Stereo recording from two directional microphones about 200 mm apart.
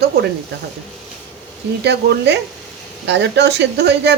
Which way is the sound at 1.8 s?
60° right (ahead or behind).